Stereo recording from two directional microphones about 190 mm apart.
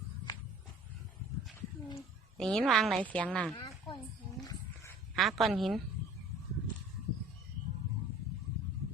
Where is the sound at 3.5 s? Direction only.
25° left (ahead or behind).